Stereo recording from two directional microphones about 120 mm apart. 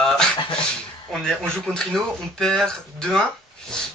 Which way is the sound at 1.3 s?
5° left (ahead or behind).